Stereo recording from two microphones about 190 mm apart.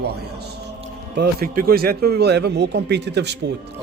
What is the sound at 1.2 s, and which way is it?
Speech, 50° right (ahead or behind).